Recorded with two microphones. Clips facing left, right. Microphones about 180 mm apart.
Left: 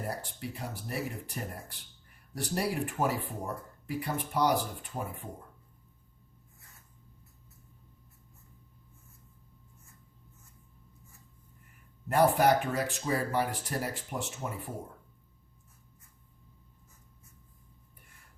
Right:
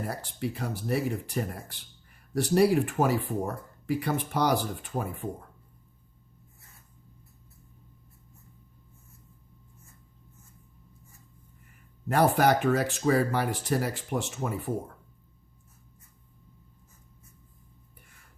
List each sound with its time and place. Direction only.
0.1 s speech: 85° right
12.0 s speech: 85° right